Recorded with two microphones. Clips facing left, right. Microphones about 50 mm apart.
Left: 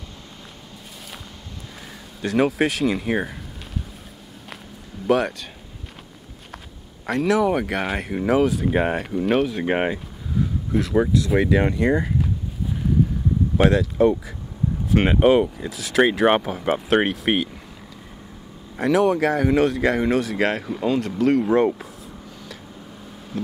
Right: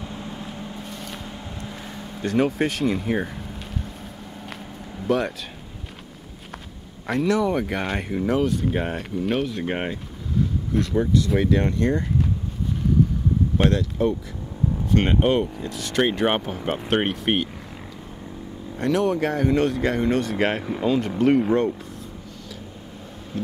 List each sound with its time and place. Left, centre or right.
5.0 s speech: centre
7.1 s speech: centre
8.6 s speech: left
8.9 s speech: centre
9.7 s speech: centre
10.7 s speech: centre
13.6 s speech: centre
18.8 s speech: centre
23.3 s vehicle: centre